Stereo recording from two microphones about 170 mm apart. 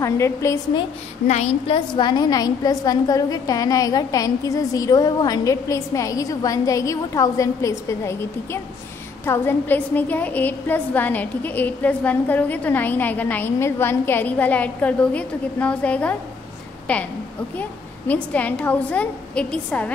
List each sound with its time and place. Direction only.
0.0 s a woman's voice: 15° left (ahead or behind)
1.2 s a woman's voice: 40° left (ahead or behind)
2.0 s a woman's voice: 25° left (ahead or behind); by 19.9 s 5° left (ahead or behind)